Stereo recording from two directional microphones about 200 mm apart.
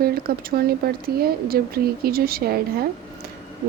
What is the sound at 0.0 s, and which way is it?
Speech, 50° right (ahead or behind).